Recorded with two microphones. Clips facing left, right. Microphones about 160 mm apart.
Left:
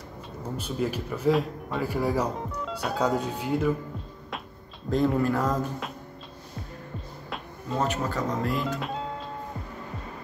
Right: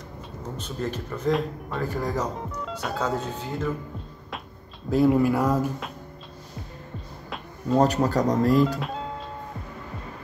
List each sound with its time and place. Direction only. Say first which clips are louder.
0.6 s speech: left 2 dB; 10° left (ahead or behind)
4.8 s speech: right 4 dB; 5° right (ahead or behind)
7.7 s speech: right 7 dB; 40° right (ahead or behind)
8.7 s music: right 1 dB; centre (ahead or behind)